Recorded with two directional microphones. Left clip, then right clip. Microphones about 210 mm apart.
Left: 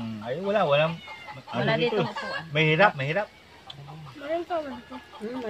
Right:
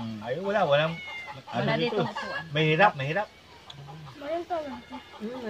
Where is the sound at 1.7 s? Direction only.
35° left (ahead or behind).